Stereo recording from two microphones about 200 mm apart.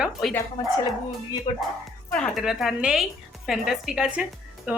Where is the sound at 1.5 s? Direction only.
25° left (ahead or behind).